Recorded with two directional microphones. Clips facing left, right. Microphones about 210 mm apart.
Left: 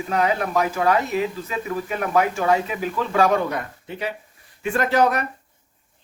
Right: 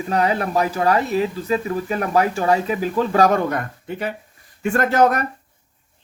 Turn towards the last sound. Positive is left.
turn(degrees=-45)  # may be behind; listen again after turning